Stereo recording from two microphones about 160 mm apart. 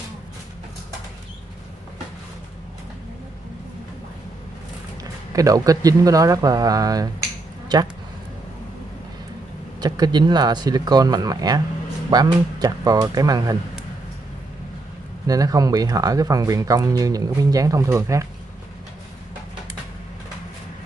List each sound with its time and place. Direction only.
5.3 s speech: 20° right (ahead or behind)
9.8 s speech: 25° right (ahead or behind)
15.2 s speech: 20° right (ahead or behind)